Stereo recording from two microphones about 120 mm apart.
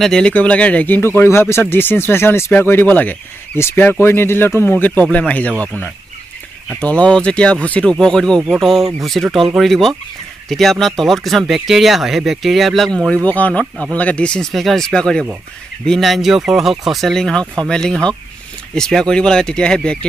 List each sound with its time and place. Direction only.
0.0 s speech: 5° left (ahead or behind)